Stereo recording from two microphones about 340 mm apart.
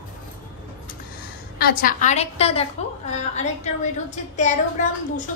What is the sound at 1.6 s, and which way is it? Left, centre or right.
A woman's voice, left.